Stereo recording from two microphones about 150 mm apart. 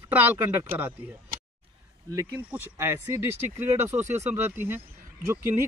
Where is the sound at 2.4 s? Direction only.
10° right (ahead or behind).